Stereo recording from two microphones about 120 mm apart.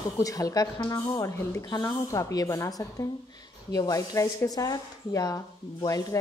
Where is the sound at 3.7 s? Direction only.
30° left (ahead or behind).